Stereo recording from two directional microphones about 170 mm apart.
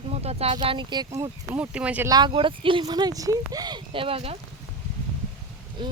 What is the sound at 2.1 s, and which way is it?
Speech, 30° right (ahead or behind).